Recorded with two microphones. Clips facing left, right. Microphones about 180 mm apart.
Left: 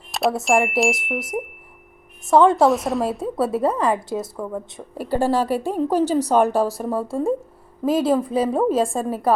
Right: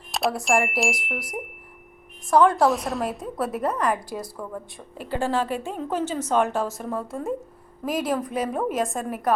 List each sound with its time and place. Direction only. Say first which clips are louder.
0.1 s chime: left 4 dB; centre (ahead or behind)
0.4 s a woman's voice: left 5 dB; centre (ahead or behind)
2.2 s a woman's voice: left 3 dB; 25° left (ahead or behind)
2.6 s a woman's voice: left 4 dB; centre (ahead or behind)
3.1 s a woman's voice: left 6 dB; 30° left (ahead or behind)
4.9 s a woman's voice: left 5 dB; 40° left (ahead or behind)